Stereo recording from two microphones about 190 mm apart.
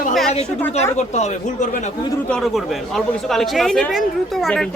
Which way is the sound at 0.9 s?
35° left (ahead or behind).